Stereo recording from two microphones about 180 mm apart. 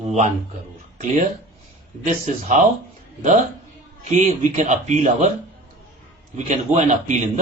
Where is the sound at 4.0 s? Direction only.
40° right (ahead or behind).